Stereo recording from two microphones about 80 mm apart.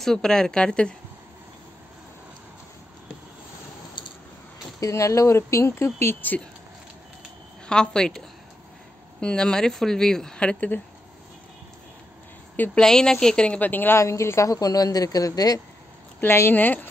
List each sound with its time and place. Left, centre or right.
0.0 s speech: centre
4.0 s a sound: left
4.7 s speech: left
7.6 s speech: centre
9.2 s speech: centre
12.7 s speech: centre; by 13.9 s left
13.9 s speech: left
16.2 s speech: left